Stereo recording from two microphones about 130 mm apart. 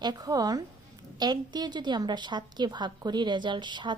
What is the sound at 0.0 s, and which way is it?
A woman's voice, 30° right (ahead or behind).